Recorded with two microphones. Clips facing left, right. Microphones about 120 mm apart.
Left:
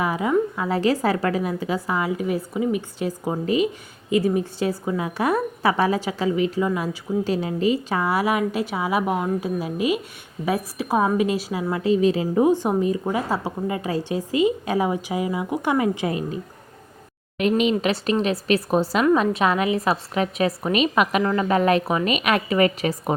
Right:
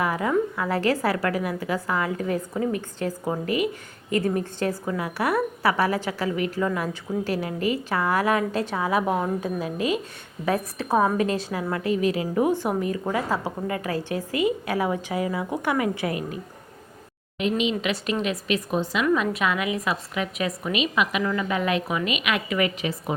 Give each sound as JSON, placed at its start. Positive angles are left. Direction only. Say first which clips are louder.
{"t": 0.0, "sound": "a woman's voice", "louder": "left 2 dB", "side_deg": 15}
{"t": 11.7, "sound": "a woman's voice", "louder": "left 5 dB", "side_deg": 25}
{"t": 17.3, "sound": "a woman's voice", "louder": "left 4 dB", "side_deg": 55}
{"t": 17.9, "sound": "a woman's voice", "louder": "left 4 dB", "side_deg": 35}